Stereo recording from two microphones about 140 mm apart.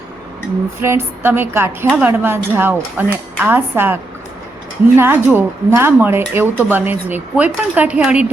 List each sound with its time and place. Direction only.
0.8 s a woman's voice: 20° right (ahead or behind)
4.9 s a woman's voice: 15° right (ahead or behind)